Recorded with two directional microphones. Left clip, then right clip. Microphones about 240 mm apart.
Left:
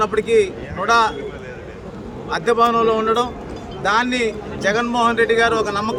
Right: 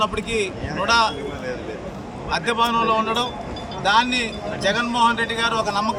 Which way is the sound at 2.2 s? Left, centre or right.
Centre.